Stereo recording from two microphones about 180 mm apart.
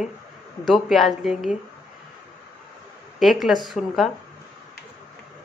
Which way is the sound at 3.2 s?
Centre (ahead or behind).